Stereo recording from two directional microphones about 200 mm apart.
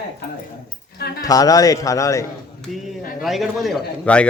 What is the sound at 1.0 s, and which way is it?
Speech, 50° left (ahead or behind).